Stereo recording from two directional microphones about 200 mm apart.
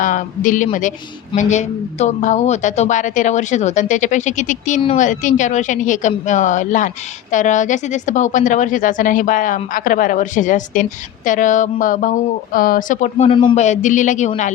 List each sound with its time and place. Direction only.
0.0 s a woman's voice: 40° left (ahead or behind); by 13.6 s 25° left (ahead or behind)
13.6 s a woman's voice: 35° left (ahead or behind)